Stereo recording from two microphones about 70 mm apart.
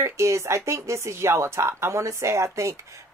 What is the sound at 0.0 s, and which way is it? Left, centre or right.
Speech, right.